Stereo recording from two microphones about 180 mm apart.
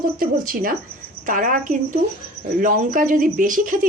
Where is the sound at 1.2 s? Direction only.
50° right (ahead or behind).